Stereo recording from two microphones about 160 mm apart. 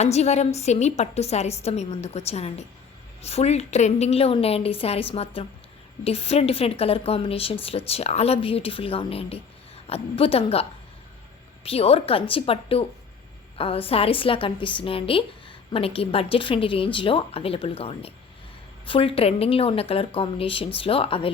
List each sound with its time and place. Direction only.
0.0 s a woman's voice: 45° left (ahead or behind)